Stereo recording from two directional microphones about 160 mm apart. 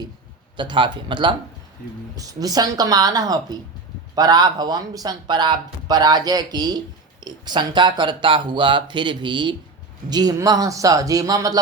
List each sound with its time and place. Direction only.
0.5 s speech: 30° right (ahead or behind)